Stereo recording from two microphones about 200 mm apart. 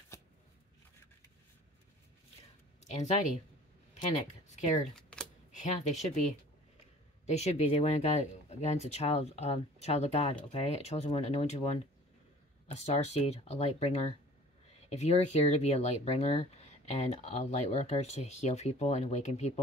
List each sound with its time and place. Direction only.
2.8 s speech: 35° left (ahead or behind)
4.9 s camera: 5° left (ahead or behind)
5.5 s speech: 35° left (ahead or behind)
7.2 s speech: 35° left (ahead or behind)